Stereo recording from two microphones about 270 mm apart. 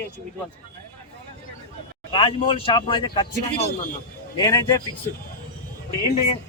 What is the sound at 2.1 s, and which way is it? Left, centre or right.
Speech, centre.